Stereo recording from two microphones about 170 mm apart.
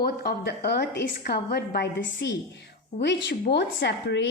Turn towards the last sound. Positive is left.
turn(degrees=90)